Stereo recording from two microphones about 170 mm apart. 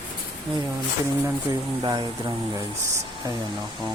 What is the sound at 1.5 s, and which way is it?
Speech, 20° right (ahead or behind).